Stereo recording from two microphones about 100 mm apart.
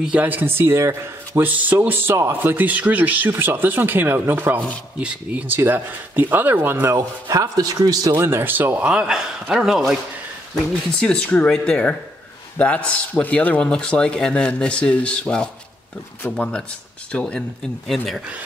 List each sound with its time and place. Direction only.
0.0 s speech: 15° right (ahead or behind)
1.5 s speech: 15° right (ahead or behind)
11.0 s speech: 10° left (ahead or behind)